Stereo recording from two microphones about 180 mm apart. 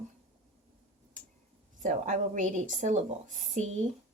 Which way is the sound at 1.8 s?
45° right (ahead or behind).